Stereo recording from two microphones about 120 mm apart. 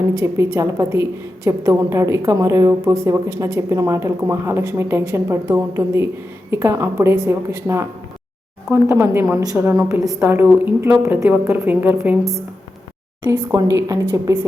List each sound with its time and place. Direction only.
0.2 s a woman's voice: 25° right (ahead or behind)
13.2 s a woman's voice: 25° right (ahead or behind)